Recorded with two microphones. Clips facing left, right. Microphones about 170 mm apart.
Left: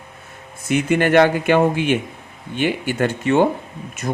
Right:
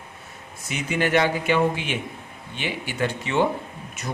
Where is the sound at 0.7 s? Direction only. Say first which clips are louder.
Left 7 dB; 55° left (ahead or behind).